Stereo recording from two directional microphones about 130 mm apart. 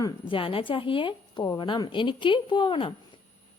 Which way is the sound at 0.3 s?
40° left (ahead or behind).